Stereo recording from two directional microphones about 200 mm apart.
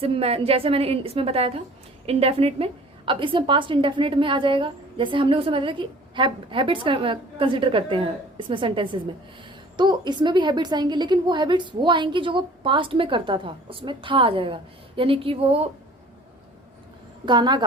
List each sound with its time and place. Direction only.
0.0 s a woman's voice: 30° right (ahead or behind)
17.2 s a woman's voice: 20° right (ahead or behind)